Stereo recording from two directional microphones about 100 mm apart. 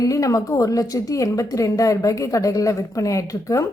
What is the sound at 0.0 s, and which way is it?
A woman's voice, 35° left (ahead or behind).